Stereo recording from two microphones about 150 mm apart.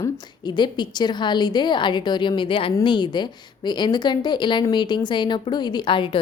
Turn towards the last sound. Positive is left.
turn(degrees=35)  # may be behind; listen again after turning